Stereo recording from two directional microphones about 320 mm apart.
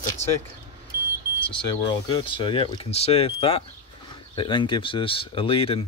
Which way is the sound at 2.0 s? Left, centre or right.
Centre.